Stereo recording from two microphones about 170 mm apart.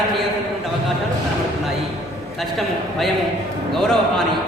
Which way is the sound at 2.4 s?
Centre (ahead or behind).